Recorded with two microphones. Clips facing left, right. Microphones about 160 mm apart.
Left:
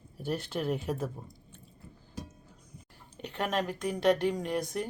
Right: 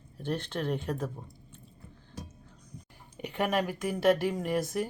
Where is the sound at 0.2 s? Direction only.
5° left (ahead or behind).